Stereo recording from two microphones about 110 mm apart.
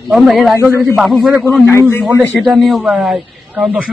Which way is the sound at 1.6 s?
20° left (ahead or behind).